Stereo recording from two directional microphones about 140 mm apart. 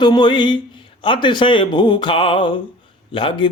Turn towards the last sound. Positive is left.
turn(degrees=35)  # may be behind; listen again after turning